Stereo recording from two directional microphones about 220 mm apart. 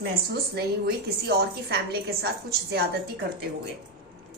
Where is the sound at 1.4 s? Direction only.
45° right (ahead or behind).